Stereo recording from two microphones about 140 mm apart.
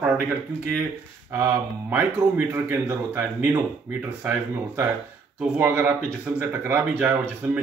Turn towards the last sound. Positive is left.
turn(degrees=-15)  # may be behind; listen again after turning